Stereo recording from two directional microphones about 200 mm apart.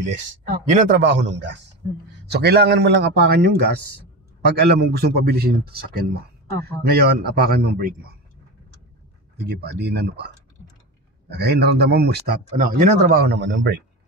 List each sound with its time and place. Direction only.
0.7 s a man's voice: 45° right (ahead or behind)
9.4 s a man's voice: 55° right (ahead or behind)
12.4 s a man's voice: 40° right (ahead or behind); by 13.8 s 60° right (ahead or behind)